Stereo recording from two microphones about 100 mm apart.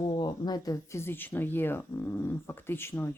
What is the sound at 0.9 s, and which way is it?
Speech, 25° left (ahead or behind).